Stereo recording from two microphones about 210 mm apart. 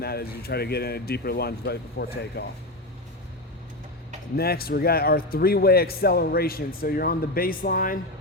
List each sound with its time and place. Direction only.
0.0 s a man's voice: 50° left (ahead or behind)
4.4 s a man's voice: 45° left (ahead or behind)